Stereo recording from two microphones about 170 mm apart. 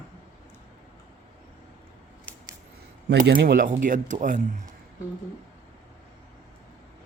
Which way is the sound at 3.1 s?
90° right.